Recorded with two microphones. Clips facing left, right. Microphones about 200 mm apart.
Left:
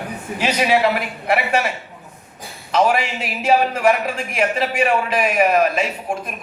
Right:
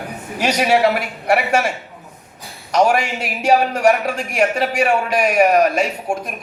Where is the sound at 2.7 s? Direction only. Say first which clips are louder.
Right 2 dB; 45° right (ahead or behind).